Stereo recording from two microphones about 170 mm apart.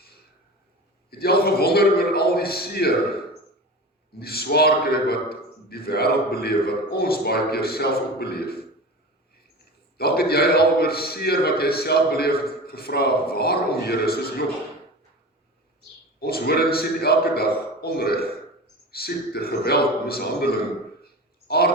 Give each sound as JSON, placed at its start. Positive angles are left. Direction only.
{"t": 1.2, "sound": "a man's voice", "side_deg": 65}
{"t": 4.2, "sound": "a man's voice", "side_deg": 65}
{"t": 10.0, "sound": "a man's voice", "side_deg": 65}
{"t": 16.2, "sound": "a man's voice", "side_deg": 65}
{"t": 21.0, "sound": "a sound", "side_deg": 70}